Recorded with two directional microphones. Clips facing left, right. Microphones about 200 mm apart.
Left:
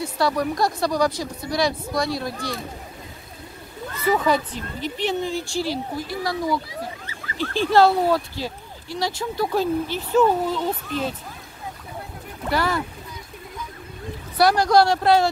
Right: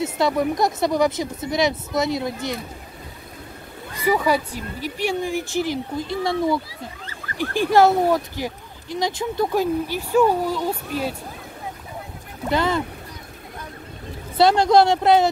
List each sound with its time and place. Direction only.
0.0 s speech: 20° right (ahead or behind)
3.9 s speech: 10° right (ahead or behind)
12.4 s speech: 20° right (ahead or behind)
14.3 s speech: 25° right (ahead or behind)